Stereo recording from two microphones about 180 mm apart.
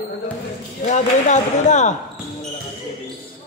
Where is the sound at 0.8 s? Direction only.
40° left (ahead or behind).